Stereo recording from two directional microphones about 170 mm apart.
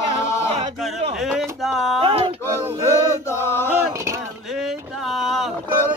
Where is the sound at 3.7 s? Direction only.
10° right (ahead or behind).